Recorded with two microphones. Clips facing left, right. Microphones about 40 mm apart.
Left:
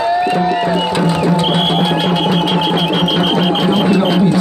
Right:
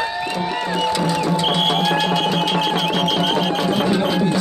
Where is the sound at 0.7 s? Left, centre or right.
Left.